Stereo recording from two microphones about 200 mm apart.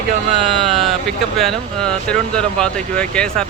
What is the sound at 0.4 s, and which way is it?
Speech, centre (ahead or behind).